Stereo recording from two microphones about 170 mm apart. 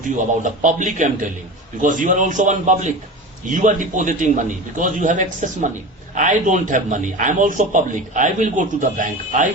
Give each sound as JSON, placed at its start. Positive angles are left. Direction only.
{"t": 0.0, "sound": "a man's voice", "side_deg": -50}